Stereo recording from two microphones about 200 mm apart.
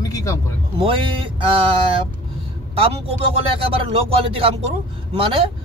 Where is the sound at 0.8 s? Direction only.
25° right (ahead or behind).